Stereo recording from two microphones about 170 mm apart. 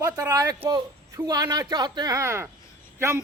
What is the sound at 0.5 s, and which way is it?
A man's voice, 30° right (ahead or behind).